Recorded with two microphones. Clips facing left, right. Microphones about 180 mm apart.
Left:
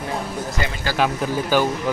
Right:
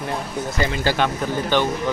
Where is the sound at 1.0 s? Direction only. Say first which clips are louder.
Left 1 dB; 5° left (ahead or behind).